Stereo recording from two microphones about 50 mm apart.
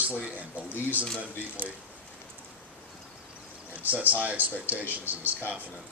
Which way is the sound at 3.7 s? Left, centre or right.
Right.